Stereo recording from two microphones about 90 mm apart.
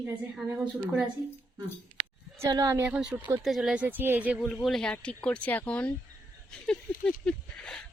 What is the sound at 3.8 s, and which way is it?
Speech, 25° right (ahead or behind).